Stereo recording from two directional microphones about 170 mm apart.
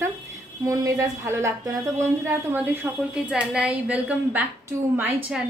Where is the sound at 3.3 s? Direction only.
5° right (ahead or behind).